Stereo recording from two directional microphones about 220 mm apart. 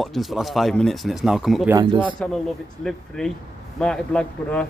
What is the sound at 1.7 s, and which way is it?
Speech, 20° right (ahead or behind).